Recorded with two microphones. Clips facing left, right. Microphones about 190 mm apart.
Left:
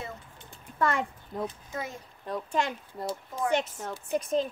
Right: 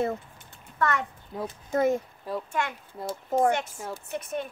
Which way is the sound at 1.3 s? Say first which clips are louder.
Even; centre (ahead or behind).